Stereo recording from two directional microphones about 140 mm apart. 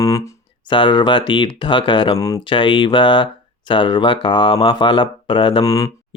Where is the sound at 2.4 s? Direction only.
35° left (ahead or behind).